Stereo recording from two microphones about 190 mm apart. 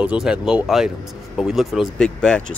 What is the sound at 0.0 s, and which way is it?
Speech, 5° right (ahead or behind).